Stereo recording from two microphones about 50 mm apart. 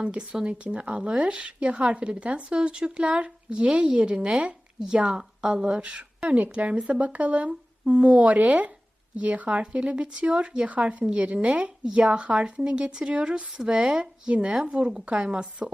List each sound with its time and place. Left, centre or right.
0.0 s speech: right